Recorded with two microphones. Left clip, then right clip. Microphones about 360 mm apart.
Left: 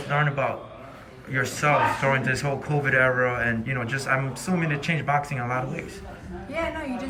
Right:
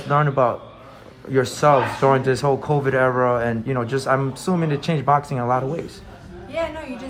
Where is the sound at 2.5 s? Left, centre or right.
Centre.